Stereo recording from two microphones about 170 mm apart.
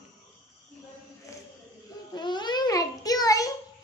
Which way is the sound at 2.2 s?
25° left (ahead or behind).